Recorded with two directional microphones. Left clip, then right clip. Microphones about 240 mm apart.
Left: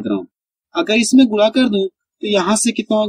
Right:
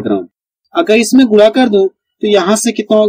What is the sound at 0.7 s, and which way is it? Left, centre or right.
Speech, centre.